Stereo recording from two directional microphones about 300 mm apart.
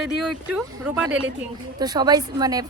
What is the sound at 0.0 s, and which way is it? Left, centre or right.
A woman's voice, centre.